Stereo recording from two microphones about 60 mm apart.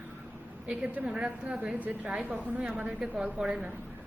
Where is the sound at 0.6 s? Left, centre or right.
Right.